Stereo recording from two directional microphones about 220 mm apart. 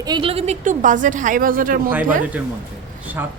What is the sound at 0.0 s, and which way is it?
A woman's voice, 20° right (ahead or behind).